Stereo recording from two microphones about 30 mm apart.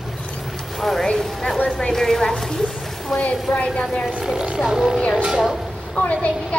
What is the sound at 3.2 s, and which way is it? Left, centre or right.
Speech, left.